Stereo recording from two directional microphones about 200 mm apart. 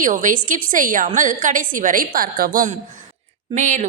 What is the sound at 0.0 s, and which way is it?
A woman's voice, 40° right (ahead or behind).